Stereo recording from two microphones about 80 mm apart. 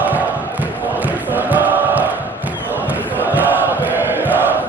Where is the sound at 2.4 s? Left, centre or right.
Right.